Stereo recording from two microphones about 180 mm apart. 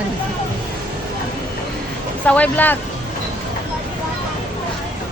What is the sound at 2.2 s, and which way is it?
Speech, 10° left (ahead or behind).